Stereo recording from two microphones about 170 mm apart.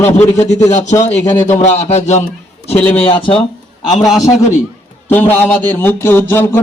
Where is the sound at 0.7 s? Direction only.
45° left (ahead or behind).